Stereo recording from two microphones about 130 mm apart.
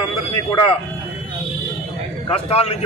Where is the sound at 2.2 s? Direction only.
50° left (ahead or behind).